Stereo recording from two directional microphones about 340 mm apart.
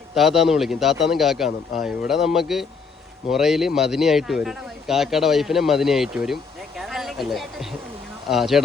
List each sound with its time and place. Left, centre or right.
0.1 s speech: centre